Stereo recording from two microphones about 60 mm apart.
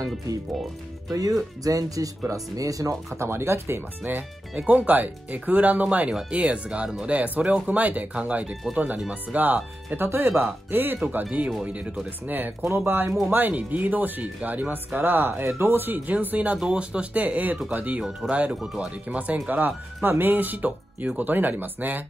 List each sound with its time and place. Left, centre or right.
1.1 s speech: right
3.2 s speech: right
10.0 s speech: right
10.7 s speech: right
11.6 s speech: right
12.4 s speech: right
13.3 s speech: right